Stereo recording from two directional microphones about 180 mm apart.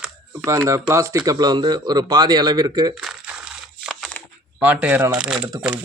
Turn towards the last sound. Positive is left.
turn(degrees=-5)  # may be behind; listen again after turning